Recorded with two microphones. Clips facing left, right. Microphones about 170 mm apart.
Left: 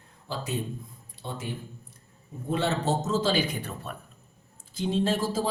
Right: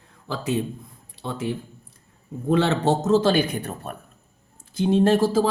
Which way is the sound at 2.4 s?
85° right.